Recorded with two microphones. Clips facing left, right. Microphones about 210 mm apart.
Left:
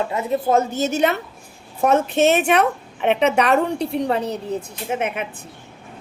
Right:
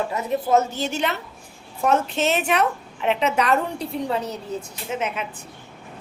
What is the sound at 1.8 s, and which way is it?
Speech, 55° left (ahead or behind).